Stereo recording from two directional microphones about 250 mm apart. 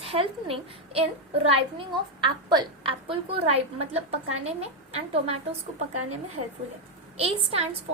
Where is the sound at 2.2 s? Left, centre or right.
Right.